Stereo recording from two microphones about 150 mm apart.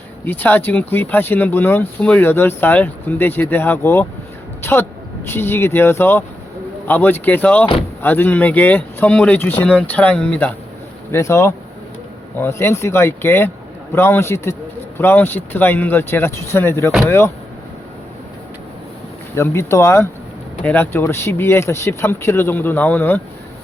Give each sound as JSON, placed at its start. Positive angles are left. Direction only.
{"t": 0.3, "sound": "speech", "side_deg": 10}
{"t": 11.1, "sound": "speech", "side_deg": 20}
{"t": 19.3, "sound": "speech", "side_deg": 20}